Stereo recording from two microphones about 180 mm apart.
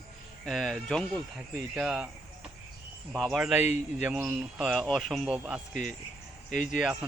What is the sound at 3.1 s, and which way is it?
Speech, centre (ahead or behind).